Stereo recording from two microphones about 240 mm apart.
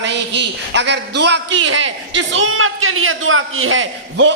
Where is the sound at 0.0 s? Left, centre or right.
Right.